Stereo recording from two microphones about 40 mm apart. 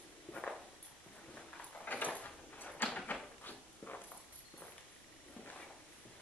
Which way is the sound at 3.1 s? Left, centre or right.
Left.